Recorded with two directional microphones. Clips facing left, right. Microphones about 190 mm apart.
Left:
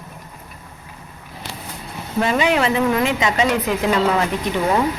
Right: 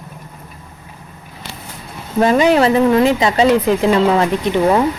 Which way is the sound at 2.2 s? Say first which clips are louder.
Right 6 dB; 40° right (ahead or behind).